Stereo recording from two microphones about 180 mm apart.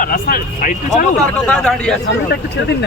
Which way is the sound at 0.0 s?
55° left (ahead or behind).